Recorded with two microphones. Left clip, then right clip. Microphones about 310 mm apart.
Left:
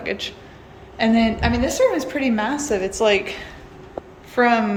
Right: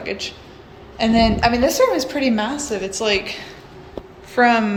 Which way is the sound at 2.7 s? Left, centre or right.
Centre.